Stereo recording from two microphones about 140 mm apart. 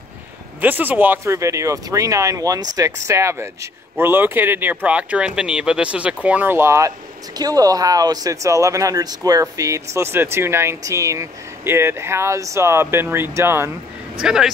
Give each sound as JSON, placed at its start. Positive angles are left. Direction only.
{"t": 0.6, "sound": "speech", "side_deg": -15}
{"t": 14.2, "sound": "speech", "side_deg": -5}